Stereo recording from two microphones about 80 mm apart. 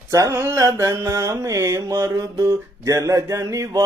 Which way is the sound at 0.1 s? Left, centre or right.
Right.